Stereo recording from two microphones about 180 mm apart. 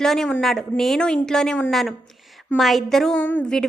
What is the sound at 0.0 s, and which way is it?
A woman's voice, 5° left (ahead or behind).